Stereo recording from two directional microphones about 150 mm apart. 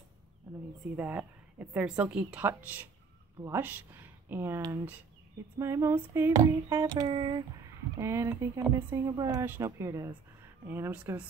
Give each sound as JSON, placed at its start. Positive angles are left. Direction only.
{"t": 0.9, "sound": "a woman's voice", "side_deg": -10}
{"t": 5.6, "sound": "a woman's voice", "side_deg": -20}
{"t": 8.0, "sound": "a woman's voice", "side_deg": -20}